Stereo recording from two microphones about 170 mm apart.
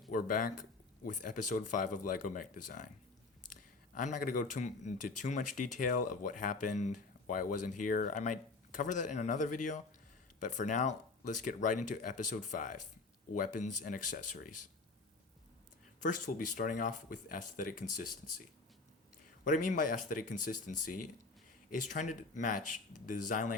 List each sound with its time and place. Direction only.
0.1 s speech: 50° left (ahead or behind)
3.9 s speech: 50° left (ahead or behind)
16.0 s speech: 50° left (ahead or behind)
19.5 s speech: 50° left (ahead or behind)